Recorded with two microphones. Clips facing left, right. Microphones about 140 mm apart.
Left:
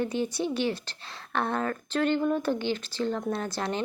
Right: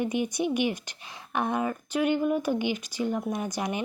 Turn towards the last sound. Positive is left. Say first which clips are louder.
# even
turn(degrees=-15)  # may be behind; listen again after turning